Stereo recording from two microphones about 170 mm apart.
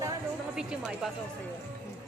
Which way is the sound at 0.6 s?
5° right (ahead or behind).